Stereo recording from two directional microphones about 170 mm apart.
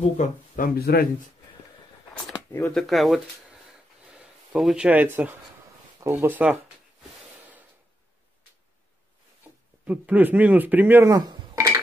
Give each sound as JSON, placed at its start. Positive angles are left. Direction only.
{"t": 0.2, "sound": "speech", "side_deg": 60}
{"t": 2.7, "sound": "speech", "side_deg": 0}
{"t": 9.8, "sound": "speech", "side_deg": -10}